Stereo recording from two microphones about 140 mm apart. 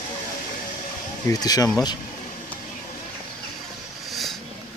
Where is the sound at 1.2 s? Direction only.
25° left (ahead or behind).